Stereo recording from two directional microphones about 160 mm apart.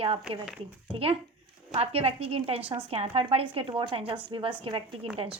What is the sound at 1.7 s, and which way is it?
A woman's voice, 40° right (ahead or behind).